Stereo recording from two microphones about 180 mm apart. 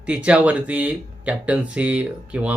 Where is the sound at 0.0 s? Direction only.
5° right (ahead or behind).